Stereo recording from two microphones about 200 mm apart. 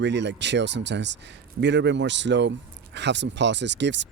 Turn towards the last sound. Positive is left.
turn(degrees=-60)  # may be behind; listen again after turning